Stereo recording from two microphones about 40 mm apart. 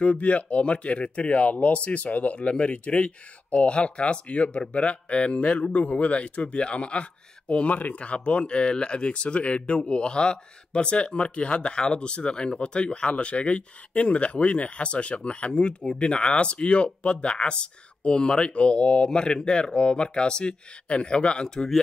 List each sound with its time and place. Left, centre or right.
0.0 s speech: left